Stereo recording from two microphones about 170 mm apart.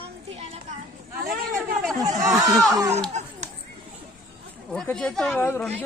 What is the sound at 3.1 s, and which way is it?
Speech, 40° right (ahead or behind).